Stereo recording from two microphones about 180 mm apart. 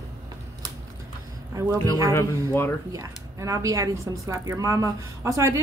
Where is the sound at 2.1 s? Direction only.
15° left (ahead or behind).